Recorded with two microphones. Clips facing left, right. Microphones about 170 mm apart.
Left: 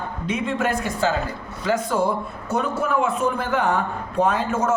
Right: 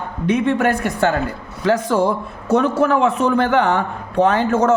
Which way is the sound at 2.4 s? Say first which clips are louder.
Right 8 dB; 90° right.